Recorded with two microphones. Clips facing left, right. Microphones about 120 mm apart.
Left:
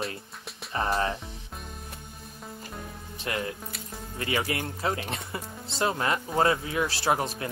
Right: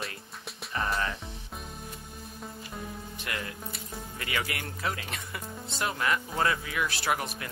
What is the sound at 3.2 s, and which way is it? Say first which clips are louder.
Speech: left 7 dB; 30° left (ahead or behind).